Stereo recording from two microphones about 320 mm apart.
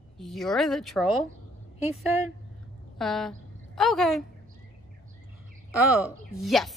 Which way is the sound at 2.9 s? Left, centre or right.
Centre.